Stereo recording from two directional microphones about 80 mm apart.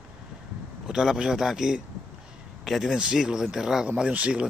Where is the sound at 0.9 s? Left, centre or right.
Centre.